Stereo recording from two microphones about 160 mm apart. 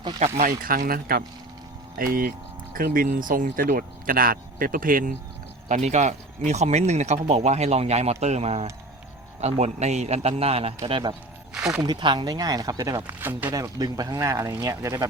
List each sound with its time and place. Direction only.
0.3 s speech: 60° right (ahead or behind)
5.6 s speech: 45° right (ahead or behind)
11.5 s speech: 5° right (ahead or behind)
11.8 s speech: 25° right (ahead or behind)
13.1 s speech: 15° right (ahead or behind)